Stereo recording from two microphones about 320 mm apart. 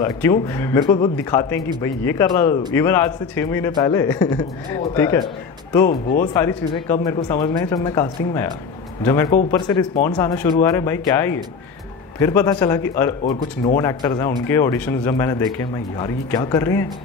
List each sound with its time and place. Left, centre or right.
0.0 s speech: centre
5.9 s speech: left
6.3 s speech: centre